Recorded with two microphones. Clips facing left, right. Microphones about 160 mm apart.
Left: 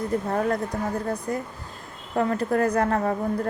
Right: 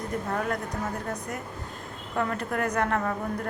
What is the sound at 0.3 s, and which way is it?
A woman's voice, 30° left (ahead or behind).